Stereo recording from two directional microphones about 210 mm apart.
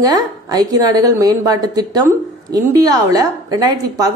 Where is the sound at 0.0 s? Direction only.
20° right (ahead or behind).